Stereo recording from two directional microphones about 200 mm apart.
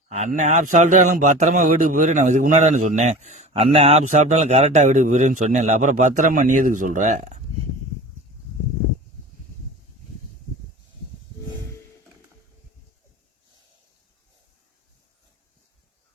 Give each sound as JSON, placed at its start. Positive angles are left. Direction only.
{"t": 0.1, "sound": "a man's voice", "side_deg": -35}